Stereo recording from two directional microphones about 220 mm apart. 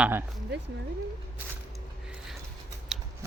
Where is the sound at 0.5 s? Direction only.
50° right (ahead or behind).